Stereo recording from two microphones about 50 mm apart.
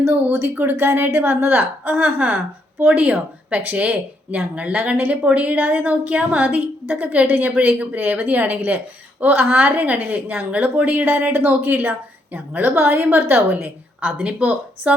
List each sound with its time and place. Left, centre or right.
0.1 s a woman's voice: right
11.0 s a woman's voice: right